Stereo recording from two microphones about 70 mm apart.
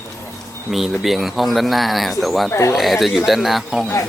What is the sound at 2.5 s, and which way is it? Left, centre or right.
Speech, left.